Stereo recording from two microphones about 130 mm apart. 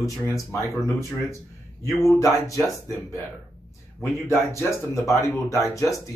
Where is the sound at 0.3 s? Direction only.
20° left (ahead or behind).